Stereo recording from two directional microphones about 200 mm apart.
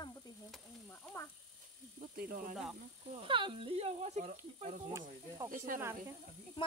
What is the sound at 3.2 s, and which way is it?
Speech, 25° right (ahead or behind).